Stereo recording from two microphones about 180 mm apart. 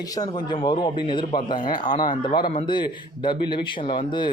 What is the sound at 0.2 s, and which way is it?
A man's voice, 25° left (ahead or behind).